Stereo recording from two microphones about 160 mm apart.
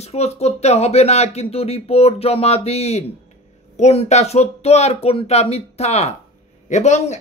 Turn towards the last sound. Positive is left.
turn(degrees=45)  # may be behind; listen again after turning